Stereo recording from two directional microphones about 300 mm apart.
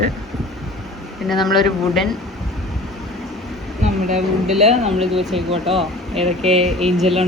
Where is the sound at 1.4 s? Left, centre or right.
Centre.